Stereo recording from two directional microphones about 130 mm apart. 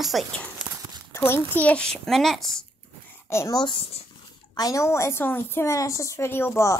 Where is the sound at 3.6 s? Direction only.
35° left (ahead or behind).